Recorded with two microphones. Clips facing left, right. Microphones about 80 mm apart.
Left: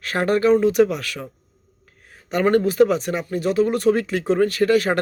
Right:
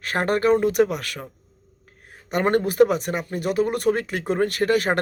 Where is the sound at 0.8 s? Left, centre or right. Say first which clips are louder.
Left 3 dB; right.